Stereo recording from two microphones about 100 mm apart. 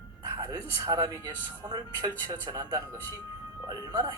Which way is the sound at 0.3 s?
45° right (ahead or behind).